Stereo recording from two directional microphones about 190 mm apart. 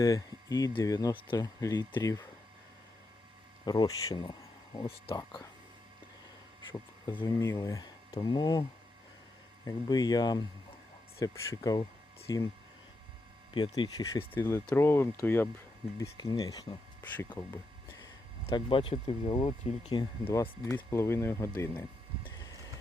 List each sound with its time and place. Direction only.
0.0 s speech: 20° left (ahead or behind)
3.6 s speech: 20° left (ahead or behind)
6.7 s speech: 25° left (ahead or behind)
9.6 s speech: 20° left (ahead or behind)
13.5 s speech: 25° left (ahead or behind)
18.4 s speech: 30° left (ahead or behind)
20.2 s speech: 15° left (ahead or behind)
22.4 s a sound: 20° left (ahead or behind)